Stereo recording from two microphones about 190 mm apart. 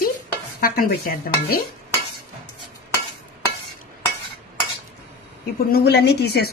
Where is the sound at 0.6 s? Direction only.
50° left (ahead or behind).